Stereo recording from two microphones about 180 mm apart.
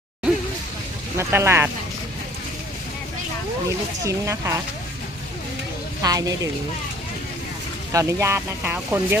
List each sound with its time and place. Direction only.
1.1 s speech: 15° right (ahead or behind)
4.0 s speech: 15° right (ahead or behind)
6.0 s speech: 20° right (ahead or behind)
7.9 s speech: 15° right (ahead or behind)